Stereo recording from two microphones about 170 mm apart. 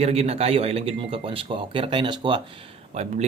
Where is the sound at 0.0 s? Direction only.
40° right (ahead or behind).